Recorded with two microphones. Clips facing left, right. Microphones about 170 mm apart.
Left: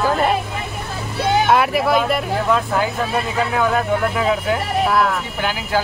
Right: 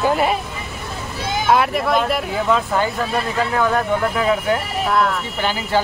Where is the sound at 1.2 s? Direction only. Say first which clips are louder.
Left 7 dB; 65° left (ahead or behind).